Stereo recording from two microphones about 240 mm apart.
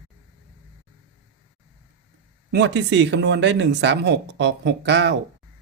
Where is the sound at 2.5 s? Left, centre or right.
Right.